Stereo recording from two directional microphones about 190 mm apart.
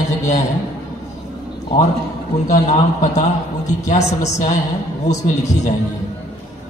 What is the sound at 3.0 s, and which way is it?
Speech, 40° left (ahead or behind).